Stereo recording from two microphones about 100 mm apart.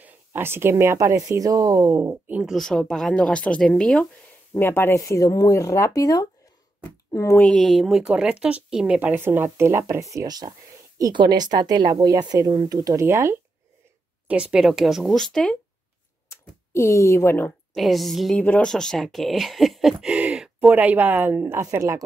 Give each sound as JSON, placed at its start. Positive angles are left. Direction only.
{"t": 0.0, "sound": "a sound", "side_deg": -20}
{"t": 0.9, "sound": "speech", "side_deg": -30}
{"t": 2.5, "sound": "speech", "side_deg": 0}
{"t": 4.6, "sound": "speech", "side_deg": 25}
{"t": 7.5, "sound": "speech", "side_deg": 0}
{"t": 14.2, "sound": "speech", "side_deg": -10}
{"t": 16.3, "sound": "speech", "side_deg": 30}
{"t": 17.7, "sound": "speech", "side_deg": 0}
{"t": 18.4, "sound": "speech", "side_deg": 15}
{"t": 18.7, "sound": "speech", "side_deg": 5}
{"t": 19.0, "sound": "a sound", "side_deg": 0}
{"t": 20.7, "sound": "speech", "side_deg": -20}